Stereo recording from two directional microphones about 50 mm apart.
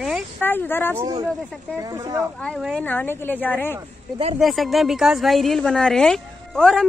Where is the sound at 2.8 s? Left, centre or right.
Left.